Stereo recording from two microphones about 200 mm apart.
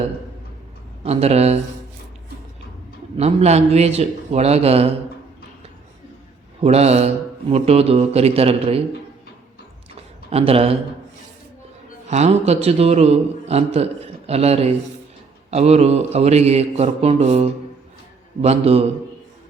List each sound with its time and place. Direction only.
1.0 s mantra: 30° right (ahead or behind)
3.2 s mantra: 30° right (ahead or behind)
6.6 s mantra: 30° right (ahead or behind)
10.2 s a man's voice: 30° right (ahead or behind)
12.0 s mantra: 35° right (ahead or behind)
18.4 s a man's voice: 30° right (ahead or behind)